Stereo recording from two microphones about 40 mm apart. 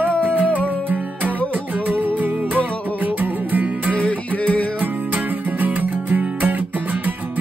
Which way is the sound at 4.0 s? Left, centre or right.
Left.